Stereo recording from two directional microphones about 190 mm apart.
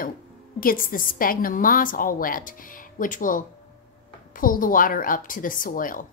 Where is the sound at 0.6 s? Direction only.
50° left (ahead or behind).